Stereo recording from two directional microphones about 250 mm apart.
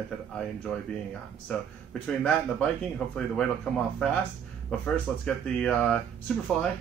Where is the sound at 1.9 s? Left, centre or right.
Centre.